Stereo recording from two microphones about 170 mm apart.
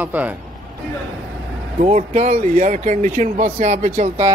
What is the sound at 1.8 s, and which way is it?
Speech, 45° right (ahead or behind).